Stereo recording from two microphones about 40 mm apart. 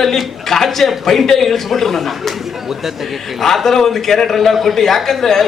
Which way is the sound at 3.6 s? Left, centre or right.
Centre.